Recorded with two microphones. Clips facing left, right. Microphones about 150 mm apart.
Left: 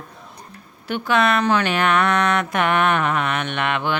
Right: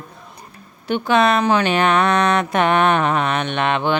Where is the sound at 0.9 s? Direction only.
20° right (ahead or behind).